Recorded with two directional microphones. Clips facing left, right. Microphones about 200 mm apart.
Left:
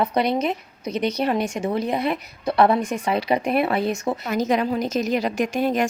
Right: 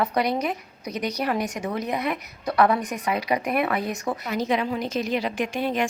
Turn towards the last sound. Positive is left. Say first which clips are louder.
# left 4 dB
turn(degrees=45)  # may be behind; listen again after turning